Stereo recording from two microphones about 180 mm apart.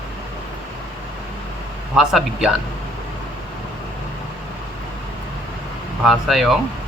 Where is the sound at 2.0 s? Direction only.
Centre (ahead or behind).